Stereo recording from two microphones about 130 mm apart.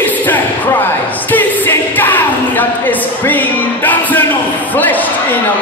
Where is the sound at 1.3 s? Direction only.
15° left (ahead or behind).